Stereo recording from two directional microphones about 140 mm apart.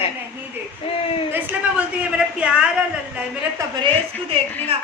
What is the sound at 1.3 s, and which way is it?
A woman's voice, 15° right (ahead or behind).